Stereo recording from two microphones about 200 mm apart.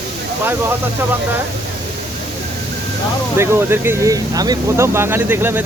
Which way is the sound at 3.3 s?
15° right (ahead or behind).